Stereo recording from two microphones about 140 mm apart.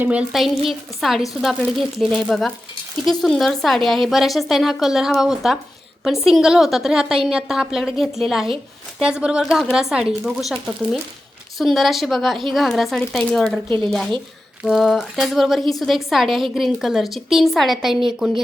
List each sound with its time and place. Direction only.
0.0 s a woman's voice: 10° right (ahead or behind)
13.7 s speech: 35° right (ahead or behind)
14.6 s a woman's voice: centre (ahead or behind)